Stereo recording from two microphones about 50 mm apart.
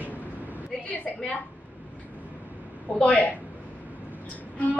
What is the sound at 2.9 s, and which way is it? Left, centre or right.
Speech, left.